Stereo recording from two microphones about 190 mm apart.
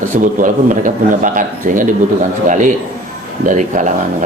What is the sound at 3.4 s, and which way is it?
Speech, 40° right (ahead or behind).